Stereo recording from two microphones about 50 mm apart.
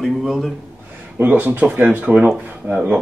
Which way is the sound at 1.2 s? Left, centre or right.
Right.